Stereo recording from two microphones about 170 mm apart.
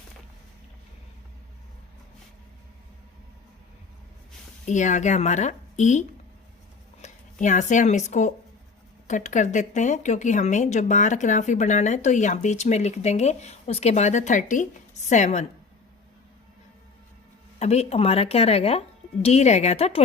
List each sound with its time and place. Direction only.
4.6 s speech: 45° left (ahead or behind)
17.6 s speech: 40° left (ahead or behind)